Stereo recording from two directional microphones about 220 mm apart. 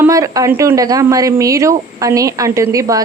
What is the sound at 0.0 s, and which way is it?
A woman's voice, 15° right (ahead or behind).